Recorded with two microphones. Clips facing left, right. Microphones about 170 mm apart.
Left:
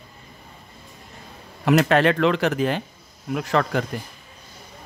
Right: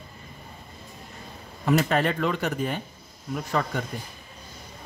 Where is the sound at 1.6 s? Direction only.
80° left.